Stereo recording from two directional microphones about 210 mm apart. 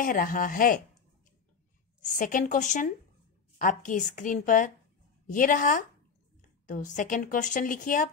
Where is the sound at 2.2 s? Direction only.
40° left (ahead or behind).